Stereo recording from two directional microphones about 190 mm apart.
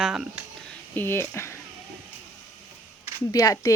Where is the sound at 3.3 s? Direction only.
20° left (ahead or behind).